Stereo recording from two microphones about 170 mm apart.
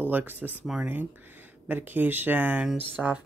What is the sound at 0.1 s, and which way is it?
Speech, 10° right (ahead or behind).